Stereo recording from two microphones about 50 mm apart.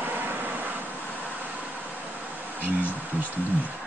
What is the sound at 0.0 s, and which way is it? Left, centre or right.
Vehicle, right.